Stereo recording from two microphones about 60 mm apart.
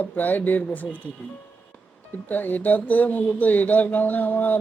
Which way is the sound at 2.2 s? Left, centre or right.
Left.